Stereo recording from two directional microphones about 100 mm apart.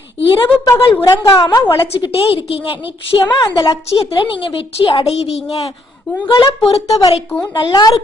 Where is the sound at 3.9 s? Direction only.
60° left (ahead or behind).